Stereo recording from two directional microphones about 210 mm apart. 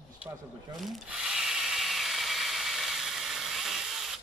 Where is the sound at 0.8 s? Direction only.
Centre (ahead or behind).